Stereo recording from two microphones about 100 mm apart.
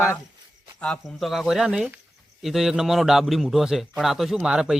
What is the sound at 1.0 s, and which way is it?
A man's voice, centre (ahead or behind).